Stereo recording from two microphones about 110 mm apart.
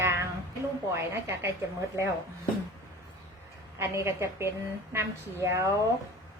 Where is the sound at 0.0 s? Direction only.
20° right (ahead or behind).